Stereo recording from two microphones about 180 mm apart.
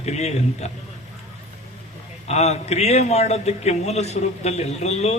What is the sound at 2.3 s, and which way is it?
A man's voice, 35° left (ahead or behind).